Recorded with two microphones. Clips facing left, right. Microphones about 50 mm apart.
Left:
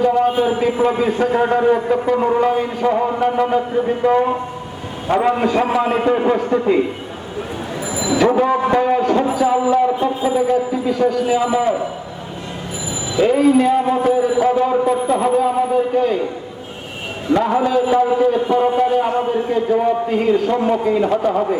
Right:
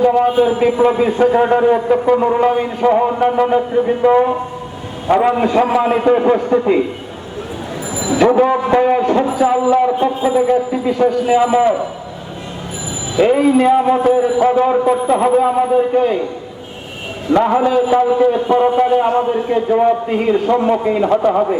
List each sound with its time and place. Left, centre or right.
0.0 s a man's voice: right
5.4 s a man's voice: right
6.1 s a man's voice: centre
8.2 s a man's voice: centre
13.1 s a man's voice: right
17.3 s a man's voice: right